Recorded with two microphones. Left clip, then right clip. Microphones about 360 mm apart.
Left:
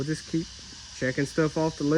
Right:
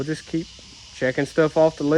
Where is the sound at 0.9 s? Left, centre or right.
Centre.